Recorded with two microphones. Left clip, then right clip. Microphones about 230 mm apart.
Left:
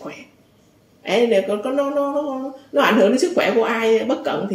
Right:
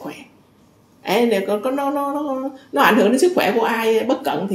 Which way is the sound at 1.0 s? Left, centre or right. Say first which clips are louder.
Left 1 dB; right.